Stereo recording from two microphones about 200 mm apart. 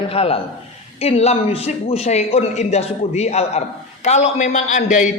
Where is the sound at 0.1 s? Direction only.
30° left (ahead or behind).